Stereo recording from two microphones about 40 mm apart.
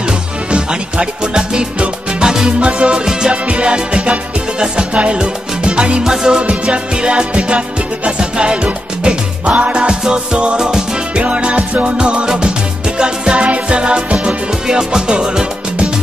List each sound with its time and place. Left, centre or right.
0.0 s music: right
3.4 s music: right
6.0 s music: centre
6.4 s music: right